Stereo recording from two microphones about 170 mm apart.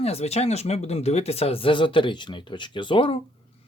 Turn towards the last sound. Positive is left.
turn(degrees=30)  # may be behind; listen again after turning